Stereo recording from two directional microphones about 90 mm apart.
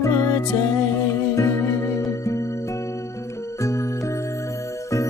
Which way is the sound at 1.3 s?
35° left (ahead or behind).